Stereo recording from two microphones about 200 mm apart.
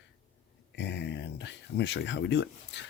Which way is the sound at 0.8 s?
60° left (ahead or behind).